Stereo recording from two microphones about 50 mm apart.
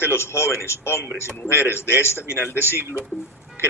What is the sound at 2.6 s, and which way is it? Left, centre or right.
Speech, right.